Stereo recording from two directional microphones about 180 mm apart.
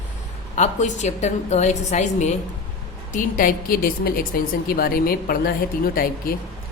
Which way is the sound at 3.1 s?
50° left (ahead or behind).